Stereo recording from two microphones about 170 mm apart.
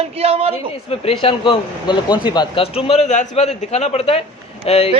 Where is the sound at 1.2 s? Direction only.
30° left (ahead or behind).